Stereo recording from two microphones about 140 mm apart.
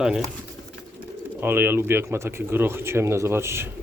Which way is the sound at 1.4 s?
15° right (ahead or behind).